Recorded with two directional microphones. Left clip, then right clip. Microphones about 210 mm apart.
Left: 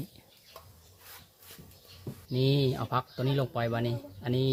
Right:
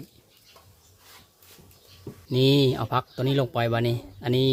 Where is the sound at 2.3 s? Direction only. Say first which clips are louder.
Right 8 dB; 35° right (ahead or behind).